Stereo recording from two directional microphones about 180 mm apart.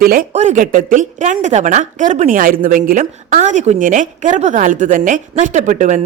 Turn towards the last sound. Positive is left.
turn(degrees=-45)  # may be behind; listen again after turning